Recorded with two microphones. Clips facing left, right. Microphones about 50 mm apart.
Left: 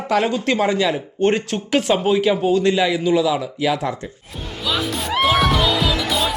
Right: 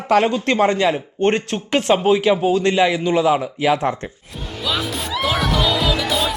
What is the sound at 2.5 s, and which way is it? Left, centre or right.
Speech, right.